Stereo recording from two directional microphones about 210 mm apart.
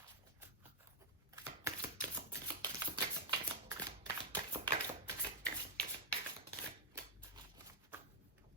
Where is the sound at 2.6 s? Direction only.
20° right (ahead or behind).